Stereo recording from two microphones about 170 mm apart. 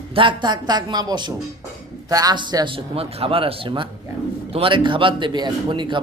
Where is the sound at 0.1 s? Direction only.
30° right (ahead or behind).